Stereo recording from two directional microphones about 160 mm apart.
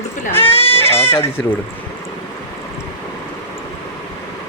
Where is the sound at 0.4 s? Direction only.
35° left (ahead or behind).